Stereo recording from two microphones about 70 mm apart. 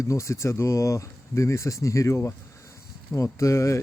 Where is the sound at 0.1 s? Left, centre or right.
Left.